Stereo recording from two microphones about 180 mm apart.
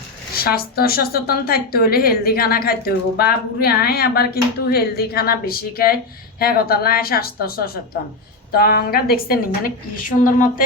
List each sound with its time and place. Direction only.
0.3 s a woman's voice: 60° left (ahead or behind)